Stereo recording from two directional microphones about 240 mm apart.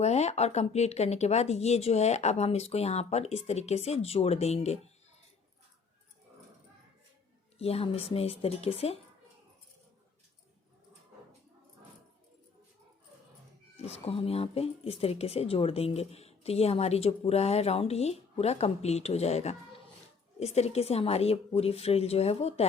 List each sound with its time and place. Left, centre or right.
0.0 s speech: left
7.6 s speech: left
13.7 s speech: left